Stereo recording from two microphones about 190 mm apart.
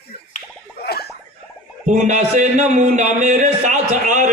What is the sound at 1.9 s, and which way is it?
A man's voice, 40° right (ahead or behind).